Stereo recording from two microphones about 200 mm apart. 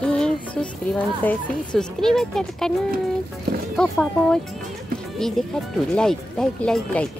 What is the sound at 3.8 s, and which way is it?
Speech, 5° left (ahead or behind).